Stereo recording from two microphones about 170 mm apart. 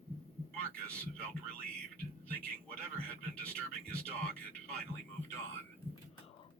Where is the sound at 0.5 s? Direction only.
5° left (ahead or behind).